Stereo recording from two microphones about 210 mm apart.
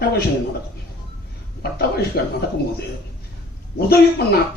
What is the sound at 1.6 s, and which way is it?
Speech, 50° left (ahead or behind).